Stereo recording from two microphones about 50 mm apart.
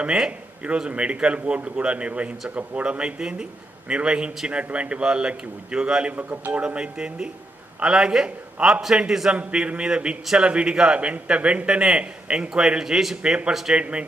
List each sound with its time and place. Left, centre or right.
0.3 s a man's voice: right
9.0 s a man's voice: centre
9.3 s a man's voice: right
12.8 s a man's voice: centre
13.2 s a man's voice: centre
13.5 s a man's voice: centre
13.7 s a man's voice: right